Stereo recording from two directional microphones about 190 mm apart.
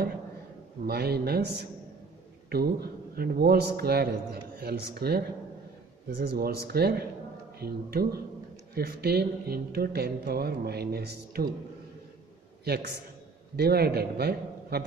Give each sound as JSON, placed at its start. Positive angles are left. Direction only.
{"t": 0.8, "sound": "a man's voice", "side_deg": -55}
{"t": 12.6, "sound": "a man's voice", "side_deg": -55}